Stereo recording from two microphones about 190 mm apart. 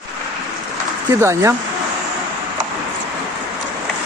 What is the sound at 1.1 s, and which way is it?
Speech, 15° right (ahead or behind).